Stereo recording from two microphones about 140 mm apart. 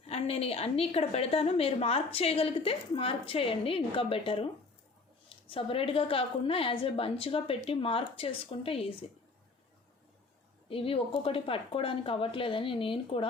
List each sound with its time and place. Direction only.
0.1 s a woman's voice: 45° left (ahead or behind)
5.5 s a woman's voice: 40° left (ahead or behind)
10.7 s a woman's voice: 40° left (ahead or behind)